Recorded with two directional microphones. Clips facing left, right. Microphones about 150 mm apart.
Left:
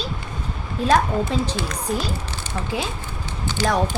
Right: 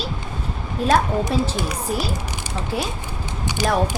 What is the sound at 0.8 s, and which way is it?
Speech, 10° right (ahead or behind).